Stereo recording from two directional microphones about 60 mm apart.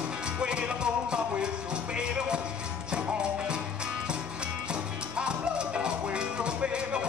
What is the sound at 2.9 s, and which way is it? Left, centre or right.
Music, centre.